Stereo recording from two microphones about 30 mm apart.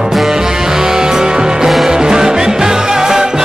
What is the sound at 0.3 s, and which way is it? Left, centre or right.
Music, centre.